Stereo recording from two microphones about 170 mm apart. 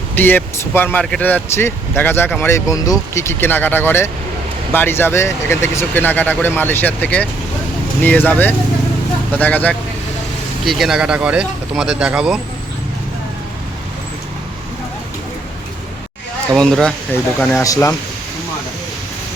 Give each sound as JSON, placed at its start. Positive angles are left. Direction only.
{"t": 0.2, "sound": "speech", "side_deg": 10}
{"t": 10.7, "sound": "speech", "side_deg": 0}
{"t": 16.5, "sound": "speech", "side_deg": 5}